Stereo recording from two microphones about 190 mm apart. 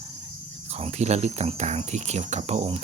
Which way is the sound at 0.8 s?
35° right (ahead or behind).